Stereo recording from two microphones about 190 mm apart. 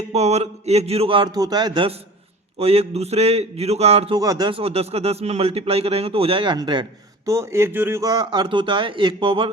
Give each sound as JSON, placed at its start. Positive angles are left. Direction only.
{"t": 0.1, "sound": "a man's voice", "side_deg": -35}
{"t": 4.2, "sound": "a man's voice", "side_deg": -20}